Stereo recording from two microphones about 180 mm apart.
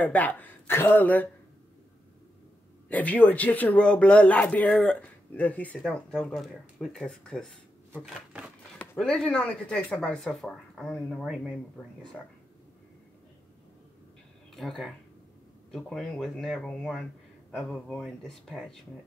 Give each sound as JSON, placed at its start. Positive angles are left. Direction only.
{"t": 0.0, "sound": "speech", "side_deg": 10}
{"t": 2.9, "sound": "speech", "side_deg": 10}
{"t": 14.5, "sound": "speech", "side_deg": 0}